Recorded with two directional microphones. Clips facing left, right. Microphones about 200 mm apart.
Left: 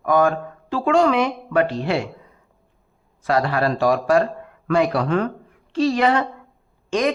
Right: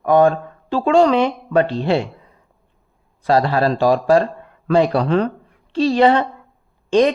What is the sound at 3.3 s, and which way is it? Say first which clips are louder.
A woman's voice: right 4 dB; 30° right (ahead or behind).